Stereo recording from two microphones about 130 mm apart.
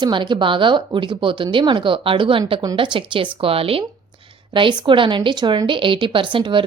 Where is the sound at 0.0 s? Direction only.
35° right (ahead or behind).